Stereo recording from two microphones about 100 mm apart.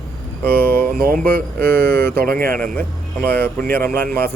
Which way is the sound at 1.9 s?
20° left (ahead or behind).